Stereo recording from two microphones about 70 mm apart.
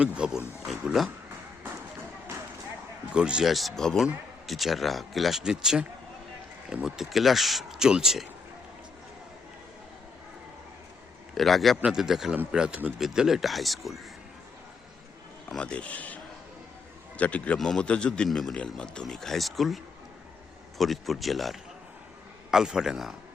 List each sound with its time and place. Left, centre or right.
0.0 s a man's voice: centre
0.9 s speech: centre
3.1 s a man's voice: centre
3.5 s speech: centre
6.8 s speech: centre
11.3 s a man's voice: centre
15.4 s speech: centre
17.6 s speech: centre
18.3 s a man's voice: centre